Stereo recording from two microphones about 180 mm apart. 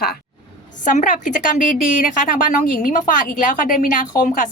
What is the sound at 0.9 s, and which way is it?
A woman's voice, 45° left (ahead or behind).